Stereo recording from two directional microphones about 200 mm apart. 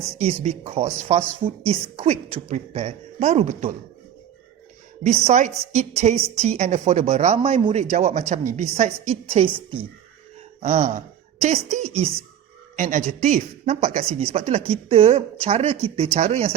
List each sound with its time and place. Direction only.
0.2 s speech: 30° right (ahead or behind)
5.0 s speech: 35° right (ahead or behind)
10.6 s speech: 35° right (ahead or behind)